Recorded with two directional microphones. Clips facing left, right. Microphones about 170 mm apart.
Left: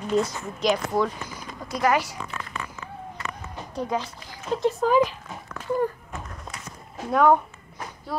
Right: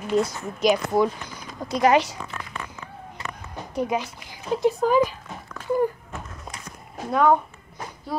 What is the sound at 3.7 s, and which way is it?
Speech, 15° right (ahead or behind).